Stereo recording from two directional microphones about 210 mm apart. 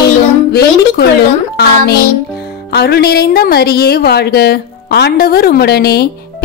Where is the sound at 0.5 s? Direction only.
50° left (ahead or behind).